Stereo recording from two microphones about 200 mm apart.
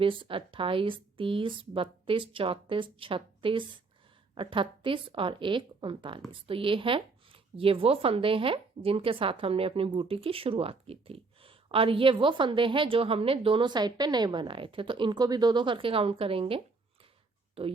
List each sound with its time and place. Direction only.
0.0 s speech: 25° right (ahead or behind)
17.6 s speech: 30° right (ahead or behind)